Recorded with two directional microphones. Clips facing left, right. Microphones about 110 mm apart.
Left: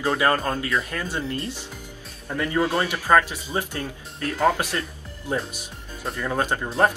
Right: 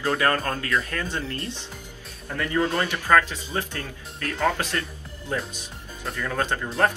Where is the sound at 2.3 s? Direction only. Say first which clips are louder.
Left 1 dB; 20° left (ahead or behind).